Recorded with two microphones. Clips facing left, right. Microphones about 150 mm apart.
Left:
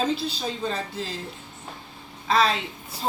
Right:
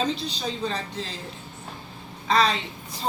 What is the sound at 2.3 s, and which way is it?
Speech, centre (ahead or behind).